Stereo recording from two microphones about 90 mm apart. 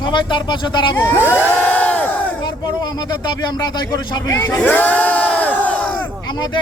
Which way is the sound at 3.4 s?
55° left (ahead or behind).